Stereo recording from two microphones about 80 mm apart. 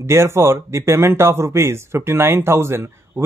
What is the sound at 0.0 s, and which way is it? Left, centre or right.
Speech, right.